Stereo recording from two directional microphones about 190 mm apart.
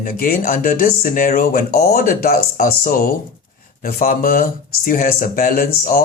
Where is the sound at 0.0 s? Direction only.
50° left (ahead or behind).